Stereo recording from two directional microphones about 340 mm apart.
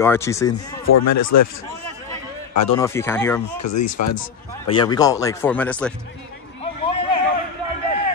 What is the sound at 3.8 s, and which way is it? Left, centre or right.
Speech, left.